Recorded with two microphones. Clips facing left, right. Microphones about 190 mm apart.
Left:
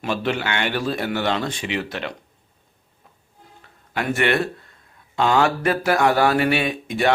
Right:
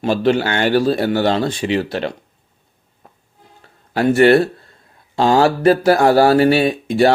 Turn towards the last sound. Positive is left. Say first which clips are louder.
# right 7 dB
turn(degrees=-35)  # may be behind; listen again after turning